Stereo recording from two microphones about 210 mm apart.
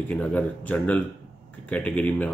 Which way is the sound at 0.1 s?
5° left (ahead or behind).